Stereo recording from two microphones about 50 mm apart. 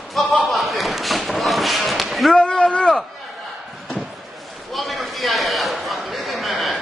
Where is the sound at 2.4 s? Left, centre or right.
Centre.